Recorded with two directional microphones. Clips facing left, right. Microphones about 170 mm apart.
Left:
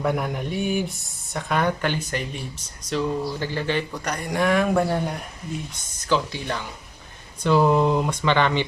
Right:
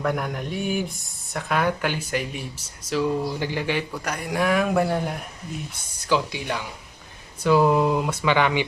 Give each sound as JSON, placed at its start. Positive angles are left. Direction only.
{"t": 0.0, "sound": "speech", "side_deg": 0}